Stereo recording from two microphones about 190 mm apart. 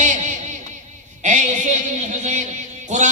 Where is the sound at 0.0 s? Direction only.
40° right (ahead or behind).